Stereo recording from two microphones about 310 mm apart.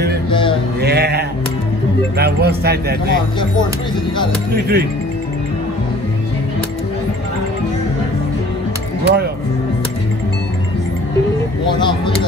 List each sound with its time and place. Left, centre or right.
0.3 s male singing: centre
0.7 s sheep: right
2.1 s speech: right
4.5 s speech: right
9.0 s speech: right
11.6 s speech: centre